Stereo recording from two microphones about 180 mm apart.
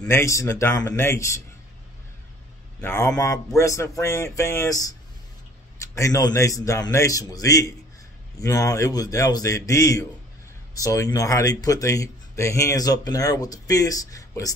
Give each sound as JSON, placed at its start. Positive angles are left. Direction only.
{"t": 0.0, "sound": "speech", "side_deg": 15}
{"t": 2.8, "sound": "speech", "side_deg": 15}